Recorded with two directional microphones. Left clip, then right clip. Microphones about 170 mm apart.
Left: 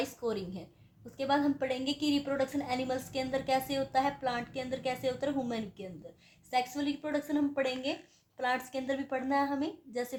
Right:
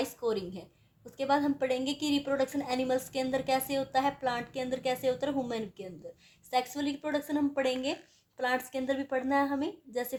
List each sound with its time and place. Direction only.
0.0 s a woman's voice: 35° right (ahead or behind)